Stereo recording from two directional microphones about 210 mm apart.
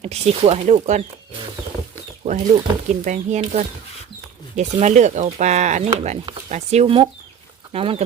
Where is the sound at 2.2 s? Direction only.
30° right (ahead or behind).